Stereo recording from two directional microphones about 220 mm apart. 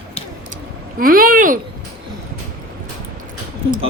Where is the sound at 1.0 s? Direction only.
40° right (ahead or behind).